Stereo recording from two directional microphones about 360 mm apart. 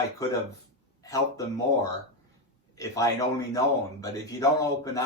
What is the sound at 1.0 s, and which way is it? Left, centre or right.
Speech, centre.